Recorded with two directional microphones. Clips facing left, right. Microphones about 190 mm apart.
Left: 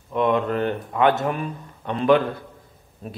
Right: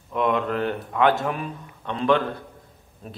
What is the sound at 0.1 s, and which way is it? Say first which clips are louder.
A man's voice: left 2 dB; centre (ahead or behind).